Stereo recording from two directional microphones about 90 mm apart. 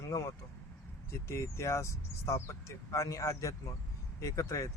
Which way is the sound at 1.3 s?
30° left (ahead or behind).